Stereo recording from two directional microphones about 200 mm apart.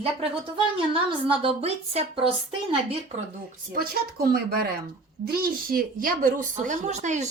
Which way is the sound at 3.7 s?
45° right (ahead or behind).